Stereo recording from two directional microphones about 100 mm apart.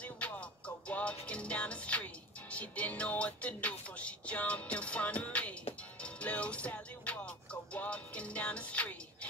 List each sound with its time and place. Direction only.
0.0 s music: 10° left (ahead or behind)